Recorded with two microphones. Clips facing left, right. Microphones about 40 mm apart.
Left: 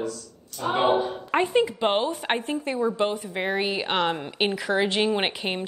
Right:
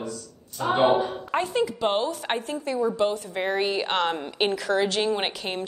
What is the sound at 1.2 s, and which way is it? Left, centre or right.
A woman's voice, left.